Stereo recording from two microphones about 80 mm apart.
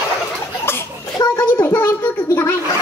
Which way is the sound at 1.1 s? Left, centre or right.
Left.